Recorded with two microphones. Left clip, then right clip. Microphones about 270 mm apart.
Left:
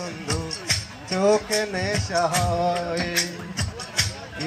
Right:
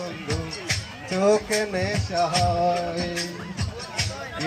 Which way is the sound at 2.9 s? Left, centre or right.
Left.